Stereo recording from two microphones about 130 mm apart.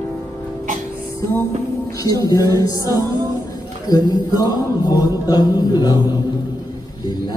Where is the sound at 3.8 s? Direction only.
30° left (ahead or behind).